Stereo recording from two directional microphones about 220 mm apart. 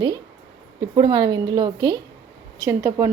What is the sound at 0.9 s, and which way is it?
A woman's voice, 20° right (ahead or behind).